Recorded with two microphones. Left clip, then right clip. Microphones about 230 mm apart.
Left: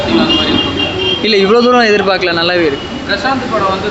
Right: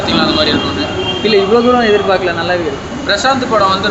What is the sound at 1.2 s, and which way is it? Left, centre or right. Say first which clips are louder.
Speech: even; left.